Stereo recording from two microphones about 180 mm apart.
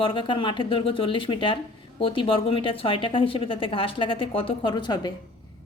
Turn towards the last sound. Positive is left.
turn(degrees=25)  # may be behind; listen again after turning